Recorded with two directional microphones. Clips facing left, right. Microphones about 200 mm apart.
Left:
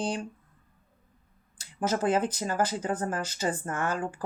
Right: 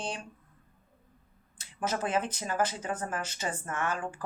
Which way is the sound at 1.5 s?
30° left (ahead or behind).